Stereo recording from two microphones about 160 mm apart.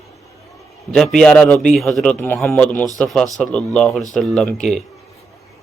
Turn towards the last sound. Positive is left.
turn(degrees=0)  # may be behind; listen again after turning